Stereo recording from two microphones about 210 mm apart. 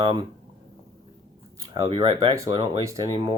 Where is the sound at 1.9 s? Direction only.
20° right (ahead or behind).